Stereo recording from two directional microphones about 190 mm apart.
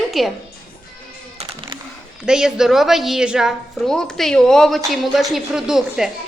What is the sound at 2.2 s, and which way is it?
A woman's voice, 5° right (ahead or behind).